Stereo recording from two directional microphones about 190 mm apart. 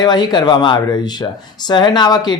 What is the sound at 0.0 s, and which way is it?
A man's voice, 20° left (ahead or behind).